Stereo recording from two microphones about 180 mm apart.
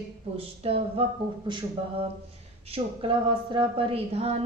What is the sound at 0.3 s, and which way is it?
A woman's voice, 30° right (ahead or behind).